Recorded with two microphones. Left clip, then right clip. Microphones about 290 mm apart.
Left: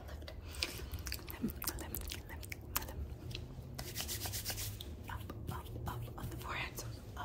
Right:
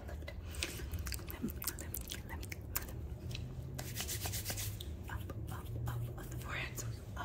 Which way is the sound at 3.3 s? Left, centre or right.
Centre.